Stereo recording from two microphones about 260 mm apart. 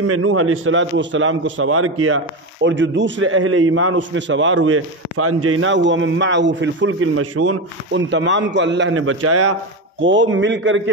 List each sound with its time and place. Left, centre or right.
0.0 s a man's voice: right